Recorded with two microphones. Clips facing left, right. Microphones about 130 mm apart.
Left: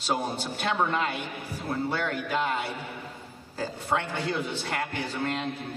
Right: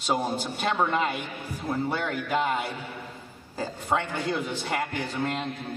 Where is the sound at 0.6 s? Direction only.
5° right (ahead or behind).